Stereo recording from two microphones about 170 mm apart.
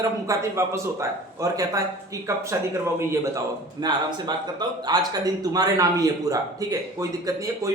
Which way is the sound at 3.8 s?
25° right (ahead or behind).